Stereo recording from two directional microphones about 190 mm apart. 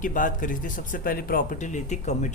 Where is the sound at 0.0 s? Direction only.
45° left (ahead or behind).